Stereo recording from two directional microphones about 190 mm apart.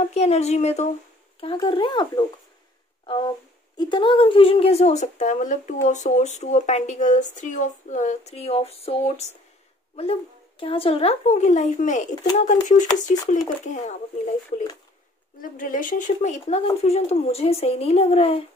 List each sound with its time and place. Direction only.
0.1 s speech: 35° left (ahead or behind)
10.6 s speech: 30° left (ahead or behind)